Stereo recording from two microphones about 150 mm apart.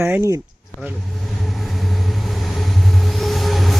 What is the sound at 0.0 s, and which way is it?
Speech, 15° right (ahead or behind).